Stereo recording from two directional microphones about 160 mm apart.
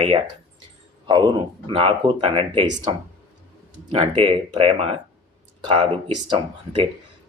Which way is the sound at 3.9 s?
30° right (ahead or behind).